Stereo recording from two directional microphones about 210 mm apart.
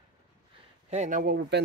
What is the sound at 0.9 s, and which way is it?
Speech, 35° right (ahead or behind).